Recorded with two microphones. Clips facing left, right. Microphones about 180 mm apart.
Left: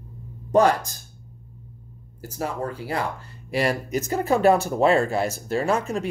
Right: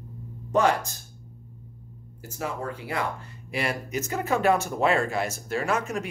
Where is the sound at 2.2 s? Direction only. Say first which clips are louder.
Left 4 dB; 35° left (ahead or behind).